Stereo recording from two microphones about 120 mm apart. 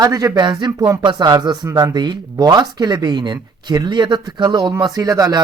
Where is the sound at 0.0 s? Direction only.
30° right (ahead or behind).